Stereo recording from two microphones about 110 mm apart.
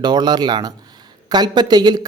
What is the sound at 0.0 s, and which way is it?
Speech, 40° right (ahead or behind).